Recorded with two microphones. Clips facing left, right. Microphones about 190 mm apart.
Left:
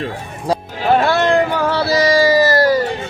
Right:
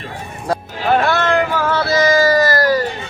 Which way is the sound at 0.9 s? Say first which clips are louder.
Left 2 dB; 30° left (ahead or behind).